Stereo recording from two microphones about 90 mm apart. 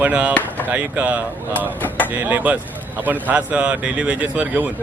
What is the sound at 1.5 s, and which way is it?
Speech, 20° left (ahead or behind).